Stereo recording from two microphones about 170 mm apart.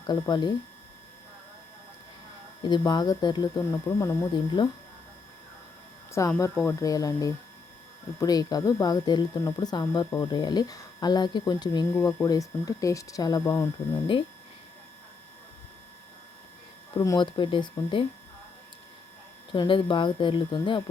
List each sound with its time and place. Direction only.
0.1 s speech: 25° left (ahead or behind)
2.6 s speech: 25° left (ahead or behind)
6.1 s speech: 15° left (ahead or behind)
17.0 s speech: 25° left (ahead or behind)
19.5 s speech: 30° left (ahead or behind)